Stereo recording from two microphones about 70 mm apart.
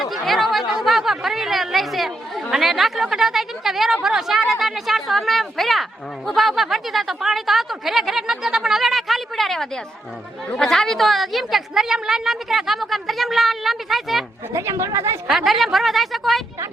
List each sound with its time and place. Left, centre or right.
0.0 s a sound: centre
0.7 s a woman's voice: centre
14.5 s speech: right
15.3 s a woman's voice: centre